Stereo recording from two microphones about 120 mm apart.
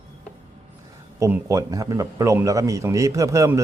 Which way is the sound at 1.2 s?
25° right (ahead or behind).